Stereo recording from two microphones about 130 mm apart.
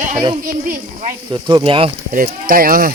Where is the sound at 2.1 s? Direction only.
90° right.